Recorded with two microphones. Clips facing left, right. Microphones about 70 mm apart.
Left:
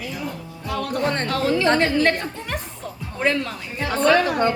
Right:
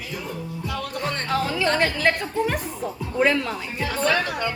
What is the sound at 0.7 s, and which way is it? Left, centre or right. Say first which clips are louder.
Music: left 6 dB; left.